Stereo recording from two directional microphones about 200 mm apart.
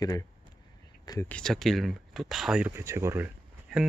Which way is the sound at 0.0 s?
15° left (ahead or behind).